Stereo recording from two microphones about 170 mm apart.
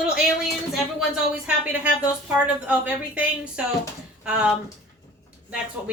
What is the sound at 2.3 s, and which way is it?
A woman's voice, 10° right (ahead or behind).